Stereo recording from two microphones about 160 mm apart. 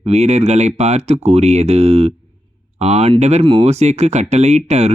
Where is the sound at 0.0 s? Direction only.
40° right (ahead or behind).